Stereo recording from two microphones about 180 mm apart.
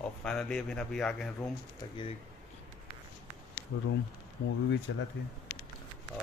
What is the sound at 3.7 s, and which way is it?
Speech, 65° left (ahead or behind).